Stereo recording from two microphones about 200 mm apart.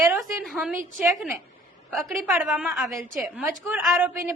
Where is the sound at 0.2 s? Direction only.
5° right (ahead or behind).